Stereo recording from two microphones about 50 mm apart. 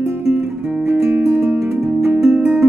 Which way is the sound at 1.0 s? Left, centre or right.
Right.